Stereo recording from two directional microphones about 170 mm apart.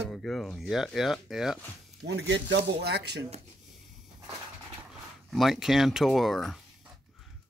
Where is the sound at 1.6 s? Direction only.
10° left (ahead or behind).